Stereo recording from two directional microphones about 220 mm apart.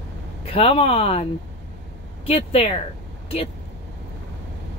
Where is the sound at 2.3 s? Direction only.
25° left (ahead or behind).